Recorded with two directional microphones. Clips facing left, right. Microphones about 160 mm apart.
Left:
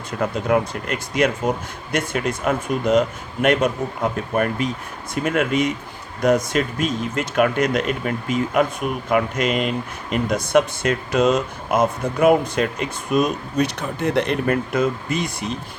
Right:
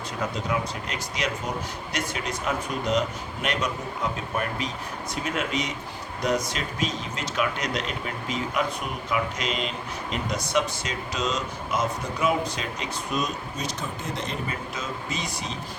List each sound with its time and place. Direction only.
0.2 s speech: 55° left (ahead or behind)